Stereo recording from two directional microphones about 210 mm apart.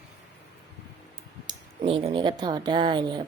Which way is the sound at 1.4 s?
25° right (ahead or behind).